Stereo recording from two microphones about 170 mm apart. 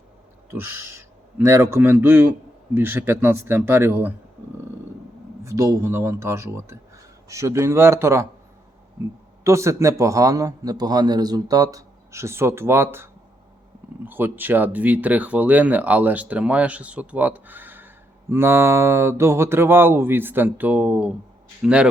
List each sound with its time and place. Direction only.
0.5 s speech: 10° right (ahead or behind)
5.4 s speech: 15° right (ahead or behind)